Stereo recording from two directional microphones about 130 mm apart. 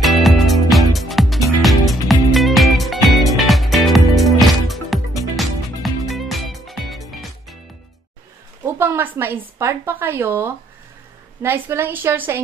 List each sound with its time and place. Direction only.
0.0 s music: centre (ahead or behind)
8.6 s a woman's voice: 15° right (ahead or behind)